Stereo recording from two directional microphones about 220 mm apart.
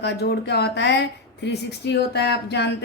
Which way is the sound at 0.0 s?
50° left (ahead or behind).